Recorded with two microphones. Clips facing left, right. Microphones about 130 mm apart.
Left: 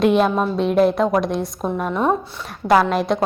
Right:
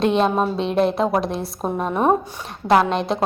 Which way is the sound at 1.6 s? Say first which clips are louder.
Right 1 dB; 30° right (ahead or behind).